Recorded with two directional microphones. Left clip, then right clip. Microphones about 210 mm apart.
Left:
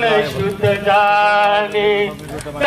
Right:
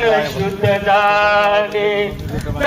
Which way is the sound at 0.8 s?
50° left (ahead or behind).